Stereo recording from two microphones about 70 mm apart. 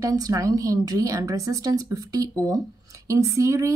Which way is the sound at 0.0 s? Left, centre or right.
Right.